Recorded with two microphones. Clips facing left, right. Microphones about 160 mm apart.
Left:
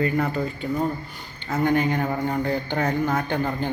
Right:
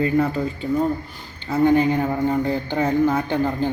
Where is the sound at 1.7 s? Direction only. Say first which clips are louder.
Right 5 dB; 30° right (ahead or behind).